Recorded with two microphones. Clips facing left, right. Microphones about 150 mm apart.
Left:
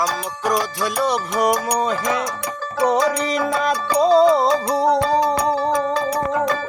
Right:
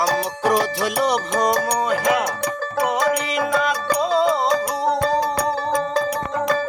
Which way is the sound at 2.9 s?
35° left (ahead or behind).